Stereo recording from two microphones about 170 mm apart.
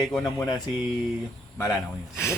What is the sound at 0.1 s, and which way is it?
Speech, 5° left (ahead or behind).